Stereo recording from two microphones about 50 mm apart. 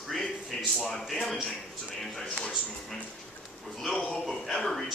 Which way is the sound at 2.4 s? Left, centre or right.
Centre.